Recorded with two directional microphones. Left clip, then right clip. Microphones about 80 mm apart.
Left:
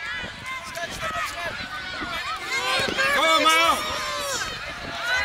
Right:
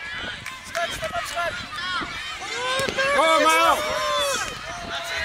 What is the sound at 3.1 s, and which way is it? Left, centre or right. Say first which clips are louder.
Run: right 1 dB; centre.